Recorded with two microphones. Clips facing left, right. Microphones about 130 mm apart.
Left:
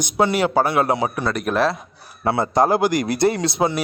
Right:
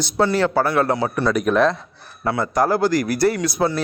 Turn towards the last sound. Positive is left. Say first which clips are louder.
# even
turn(degrees=25)  # may be behind; listen again after turning